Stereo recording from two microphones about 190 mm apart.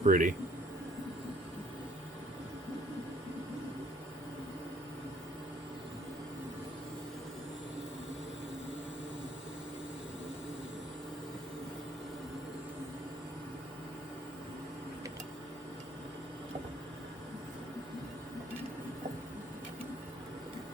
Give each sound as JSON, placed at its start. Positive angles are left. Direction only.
{"t": 0.0, "sound": "a man's voice", "side_deg": -45}